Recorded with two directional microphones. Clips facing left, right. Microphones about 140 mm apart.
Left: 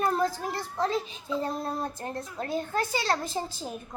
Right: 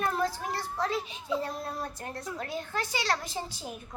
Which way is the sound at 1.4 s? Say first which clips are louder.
Left 4 dB; 30° left (ahead or behind).